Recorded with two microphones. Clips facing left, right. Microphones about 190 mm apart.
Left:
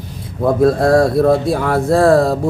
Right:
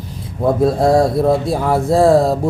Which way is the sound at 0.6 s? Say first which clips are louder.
Left 2 dB; 65° left (ahead or behind).